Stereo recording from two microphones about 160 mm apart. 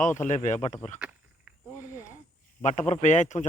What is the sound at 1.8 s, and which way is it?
Cricket, 20° left (ahead or behind).